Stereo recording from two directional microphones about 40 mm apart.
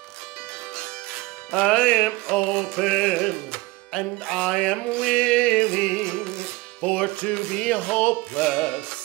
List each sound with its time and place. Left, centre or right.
1.5 s music: left